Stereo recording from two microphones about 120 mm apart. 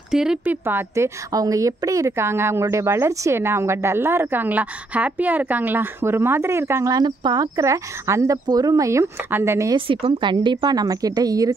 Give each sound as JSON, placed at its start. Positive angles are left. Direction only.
{"t": 0.1, "sound": "speech", "side_deg": -5}
{"t": 0.7, "sound": "a woman's voice", "side_deg": -20}
{"t": 9.8, "sound": "a woman's voice", "side_deg": -45}